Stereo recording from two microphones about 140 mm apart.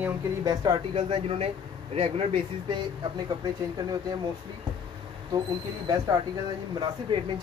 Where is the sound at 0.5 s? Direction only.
25° right (ahead or behind).